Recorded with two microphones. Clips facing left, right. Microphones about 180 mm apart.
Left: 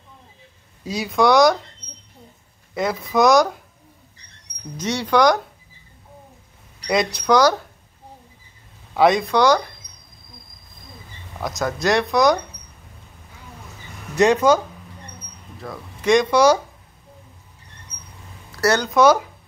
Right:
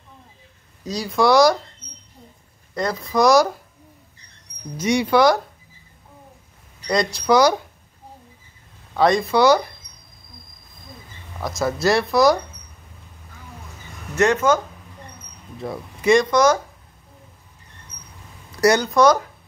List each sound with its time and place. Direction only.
0.9 s speech: centre (ahead or behind)
2.7 s speech: 5° left (ahead or behind)
4.7 s speech: 10° right (ahead or behind)
7.2 s speech: 10° right (ahead or behind)
8.9 s speech: 5° left (ahead or behind)
9.3 s speech: 10° right (ahead or behind)
11.4 s speech: centre (ahead or behind)
14.1 s speech: 15° left (ahead or behind)
15.6 s speech: 25° right (ahead or behind)
16.0 s speech: 5° right (ahead or behind)
16.3 s speech: 10° left (ahead or behind)
18.6 s speech: 15° right (ahead or behind)
18.9 s speech: 5° left (ahead or behind)